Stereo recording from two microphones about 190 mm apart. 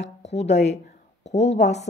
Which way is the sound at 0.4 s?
35° left (ahead or behind).